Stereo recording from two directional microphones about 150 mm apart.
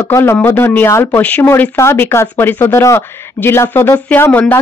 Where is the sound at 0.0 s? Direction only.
15° left (ahead or behind).